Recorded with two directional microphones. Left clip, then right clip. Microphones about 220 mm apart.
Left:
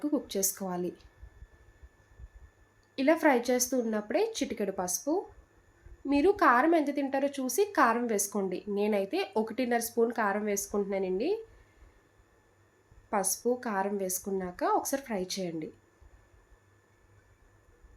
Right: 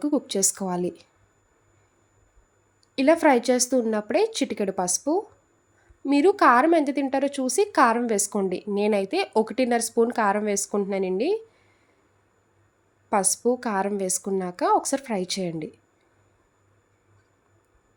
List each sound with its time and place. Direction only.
0.0 s a woman's voice: 45° right (ahead or behind)
2.9 s a woman's voice: 45° right (ahead or behind)
13.1 s a woman's voice: 45° right (ahead or behind)